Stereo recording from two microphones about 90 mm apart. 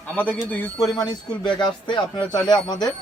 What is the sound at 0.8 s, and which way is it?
A man's voice, 50° left (ahead or behind).